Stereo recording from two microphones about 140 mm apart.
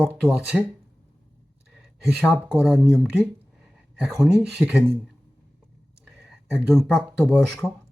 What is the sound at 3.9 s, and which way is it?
Speech, 5° right (ahead or behind).